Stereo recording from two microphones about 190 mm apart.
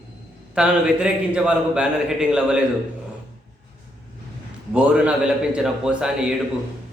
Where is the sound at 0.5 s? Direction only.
5° right (ahead or behind).